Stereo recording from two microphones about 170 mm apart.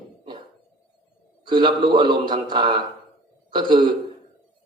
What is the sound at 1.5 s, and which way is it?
A man's voice, 25° right (ahead or behind).